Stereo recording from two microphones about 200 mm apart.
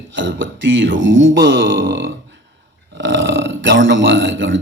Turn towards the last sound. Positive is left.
turn(degrees=-70)  # may be behind; listen again after turning